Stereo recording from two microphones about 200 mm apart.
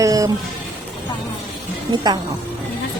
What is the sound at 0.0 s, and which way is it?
Music, 15° right (ahead or behind).